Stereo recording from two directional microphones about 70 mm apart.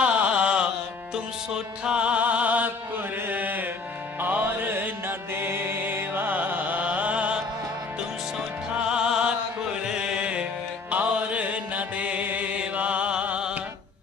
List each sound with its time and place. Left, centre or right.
0.0 s mantra: centre
1.1 s music: centre
3.2 s mantra: right
4.2 s music: right
8.7 s music: centre